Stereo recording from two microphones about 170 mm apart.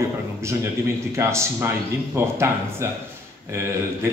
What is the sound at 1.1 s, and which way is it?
A man's voice, 15° right (ahead or behind).